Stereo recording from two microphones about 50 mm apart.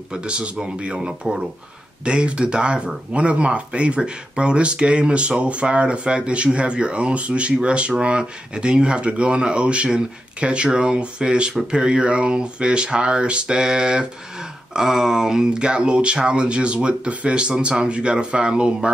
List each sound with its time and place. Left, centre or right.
0.1 s speech: right